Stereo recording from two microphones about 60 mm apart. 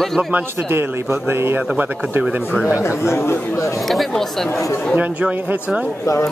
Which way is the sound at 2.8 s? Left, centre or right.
Left.